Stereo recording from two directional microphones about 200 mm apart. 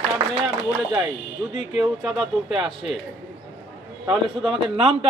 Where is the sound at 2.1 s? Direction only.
Centre (ahead or behind).